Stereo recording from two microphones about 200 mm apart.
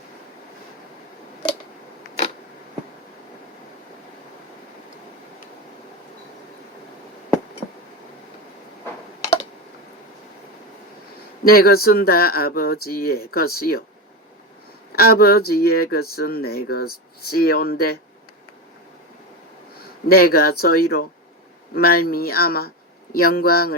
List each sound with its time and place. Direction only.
11.4 s speech: 50° left (ahead or behind)
14.9 s speech: 50° left (ahead or behind)
20.1 s speech: 50° left (ahead or behind)